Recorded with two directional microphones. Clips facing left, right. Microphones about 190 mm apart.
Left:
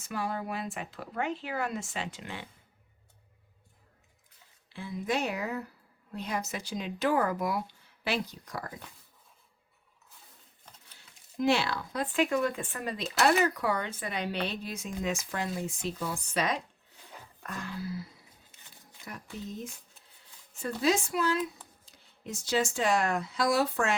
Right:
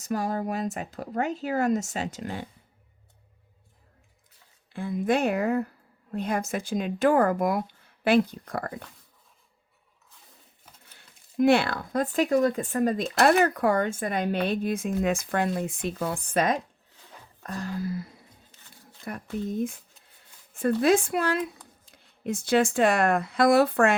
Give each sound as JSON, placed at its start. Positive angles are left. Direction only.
{"t": 0.0, "sound": "speech", "side_deg": -40}
{"t": 4.7, "sound": "speech", "side_deg": -50}
{"t": 10.7, "sound": "a sound", "side_deg": -5}
{"t": 11.3, "sound": "speech", "side_deg": -55}
{"t": 17.4, "sound": "speech", "side_deg": -35}